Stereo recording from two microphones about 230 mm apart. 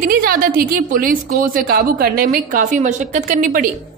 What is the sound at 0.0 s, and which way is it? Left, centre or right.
A woman's voice, right.